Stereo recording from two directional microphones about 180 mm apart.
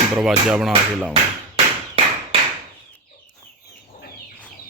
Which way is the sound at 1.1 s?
35° right (ahead or behind).